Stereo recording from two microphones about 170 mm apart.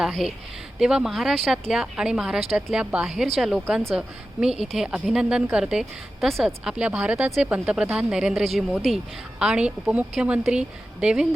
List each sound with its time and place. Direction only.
0.0 s a woman's voice: centre (ahead or behind)